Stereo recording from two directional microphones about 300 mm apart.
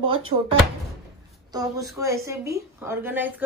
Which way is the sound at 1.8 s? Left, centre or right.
Centre.